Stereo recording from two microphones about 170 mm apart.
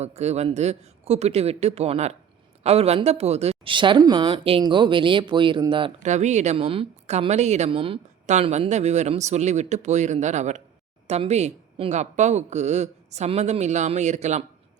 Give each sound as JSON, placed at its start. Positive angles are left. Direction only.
{"t": 0.0, "sound": "speech", "side_deg": -40}
{"t": 6.0, "sound": "speech", "side_deg": -45}